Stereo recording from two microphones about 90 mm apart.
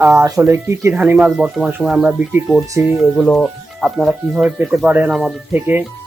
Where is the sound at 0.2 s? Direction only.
35° right (ahead or behind).